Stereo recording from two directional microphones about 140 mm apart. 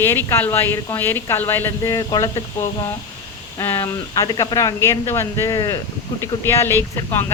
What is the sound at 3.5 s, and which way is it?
Speech, 20° left (ahead or behind).